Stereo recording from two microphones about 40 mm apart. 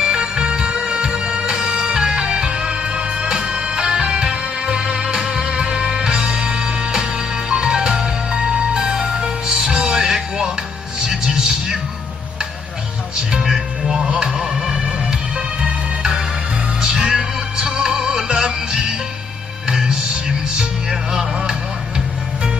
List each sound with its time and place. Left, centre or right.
0.0 s music: right
13.3 s music: centre